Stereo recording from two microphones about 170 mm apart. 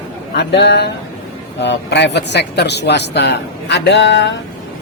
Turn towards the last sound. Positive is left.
turn(degrees=90)